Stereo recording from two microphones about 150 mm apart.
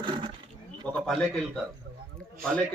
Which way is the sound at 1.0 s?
Centre (ahead or behind).